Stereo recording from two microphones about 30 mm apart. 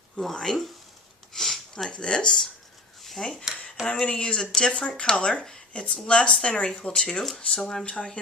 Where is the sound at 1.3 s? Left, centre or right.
Centre.